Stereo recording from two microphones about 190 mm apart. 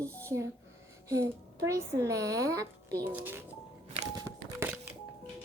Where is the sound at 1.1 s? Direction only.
15° right (ahead or behind).